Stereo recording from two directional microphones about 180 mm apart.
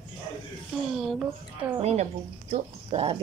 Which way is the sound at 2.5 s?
35° right (ahead or behind).